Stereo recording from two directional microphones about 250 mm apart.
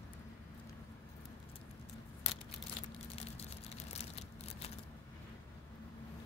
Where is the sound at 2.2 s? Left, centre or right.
Left.